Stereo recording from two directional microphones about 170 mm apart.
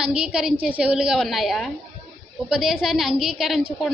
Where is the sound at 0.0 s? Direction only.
5° right (ahead or behind).